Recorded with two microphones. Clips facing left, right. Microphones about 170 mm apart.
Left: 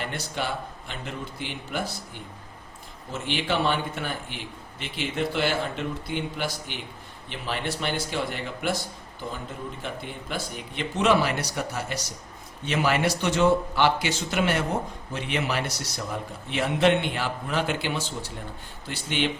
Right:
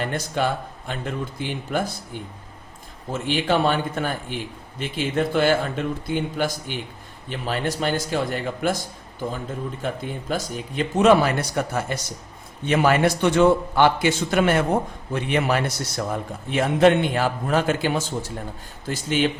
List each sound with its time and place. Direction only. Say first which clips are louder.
0.0 s a man's voice: right 7 dB; 45° right (ahead or behind)
3.1 s a man's voice: right 6 dB; 50° right (ahead or behind)